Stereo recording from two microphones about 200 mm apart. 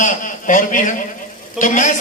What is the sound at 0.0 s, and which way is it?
A man's voice, 40° left (ahead or behind).